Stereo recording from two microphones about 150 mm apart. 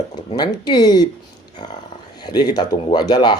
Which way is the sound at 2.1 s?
30° left (ahead or behind).